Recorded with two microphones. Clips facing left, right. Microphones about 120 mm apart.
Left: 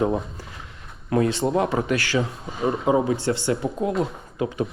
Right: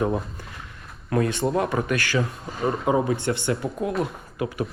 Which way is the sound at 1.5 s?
25° left (ahead or behind).